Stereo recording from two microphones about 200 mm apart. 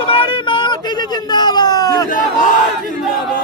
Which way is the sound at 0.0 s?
25° left (ahead or behind).